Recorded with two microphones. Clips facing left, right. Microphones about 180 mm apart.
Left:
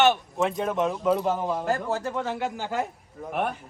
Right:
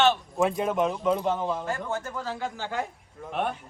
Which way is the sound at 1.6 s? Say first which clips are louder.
Left 5 dB; 40° left (ahead or behind).